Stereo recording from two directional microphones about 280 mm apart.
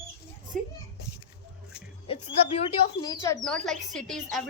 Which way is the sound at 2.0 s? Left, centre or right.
Centre.